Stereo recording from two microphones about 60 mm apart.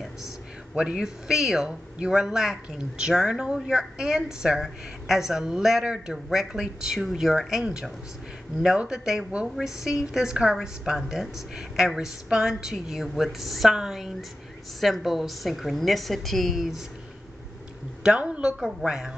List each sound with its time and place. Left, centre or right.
0.7 s a woman's voice: centre
8.6 s a woman's voice: centre
18.0 s a woman's voice: centre
18.6 s a woman's voice: centre